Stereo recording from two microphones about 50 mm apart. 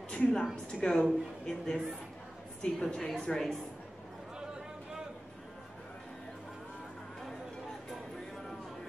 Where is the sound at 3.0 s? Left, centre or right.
Centre.